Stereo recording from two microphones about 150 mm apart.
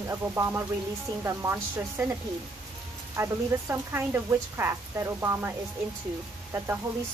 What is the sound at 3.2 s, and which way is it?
Speech, 15° right (ahead or behind).